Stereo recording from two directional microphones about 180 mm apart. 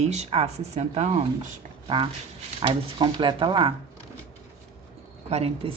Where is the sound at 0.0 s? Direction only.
40° right (ahead or behind).